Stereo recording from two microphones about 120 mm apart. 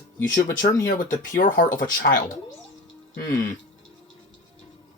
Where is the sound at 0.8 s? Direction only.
90° left.